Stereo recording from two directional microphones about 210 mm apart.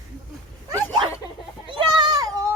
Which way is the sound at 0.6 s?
20° right (ahead or behind).